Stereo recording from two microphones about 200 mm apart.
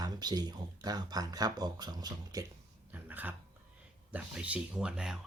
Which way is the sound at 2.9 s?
10° right (ahead or behind).